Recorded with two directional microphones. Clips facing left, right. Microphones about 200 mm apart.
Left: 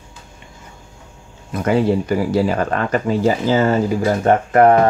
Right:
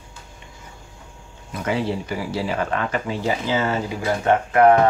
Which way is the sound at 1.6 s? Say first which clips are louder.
Left 7 dB; 45° left (ahead or behind).